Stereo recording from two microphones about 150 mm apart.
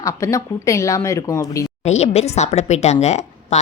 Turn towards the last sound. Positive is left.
turn(degrees=50)  # may be behind; listen again after turning